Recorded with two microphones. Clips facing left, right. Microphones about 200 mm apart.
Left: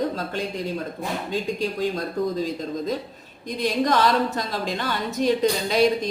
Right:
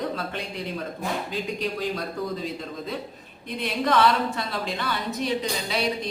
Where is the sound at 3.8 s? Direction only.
40° left (ahead or behind).